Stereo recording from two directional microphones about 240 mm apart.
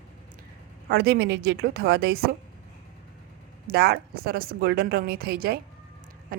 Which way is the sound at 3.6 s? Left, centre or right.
Right.